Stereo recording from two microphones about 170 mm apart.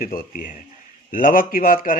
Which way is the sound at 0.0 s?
55° left (ahead or behind).